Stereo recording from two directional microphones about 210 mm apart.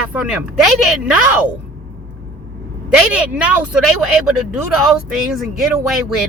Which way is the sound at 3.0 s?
5° right (ahead or behind).